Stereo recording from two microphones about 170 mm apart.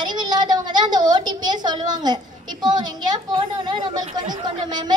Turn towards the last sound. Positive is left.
turn(degrees=-25)  # may be behind; listen again after turning